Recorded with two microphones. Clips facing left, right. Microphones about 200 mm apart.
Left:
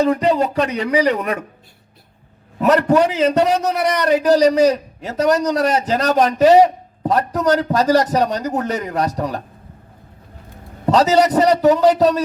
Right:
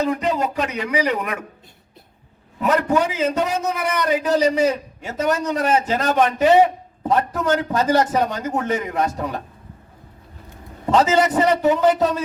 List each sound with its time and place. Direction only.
0.2 s a man's voice: 35° left (ahead or behind)
2.6 s a man's voice: 35° left (ahead or behind)
10.8 s a man's voice: 35° left (ahead or behind)